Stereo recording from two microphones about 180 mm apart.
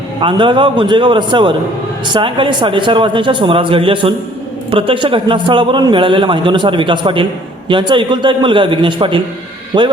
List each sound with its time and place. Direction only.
0.2 s a man's voice: 25° right (ahead or behind)